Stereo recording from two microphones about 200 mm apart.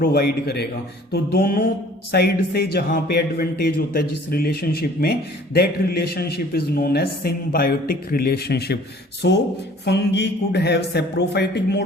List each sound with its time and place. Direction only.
0.0 s a man's voice: 50° left (ahead or behind)